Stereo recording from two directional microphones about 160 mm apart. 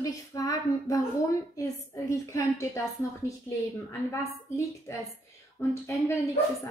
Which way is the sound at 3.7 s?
20° left (ahead or behind).